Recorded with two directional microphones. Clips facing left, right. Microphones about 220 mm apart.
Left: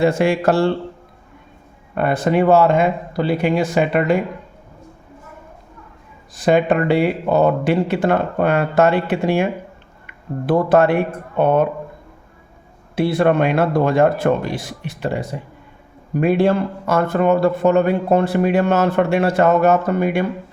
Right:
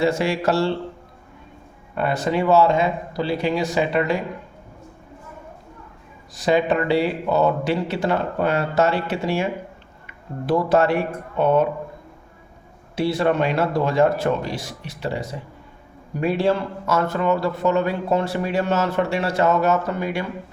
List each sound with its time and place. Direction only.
0.0 s speech: 55° left (ahead or behind)
2.0 s speech: 55° left (ahead or behind)
6.3 s speech: 55° left (ahead or behind)
13.0 s speech: 55° left (ahead or behind)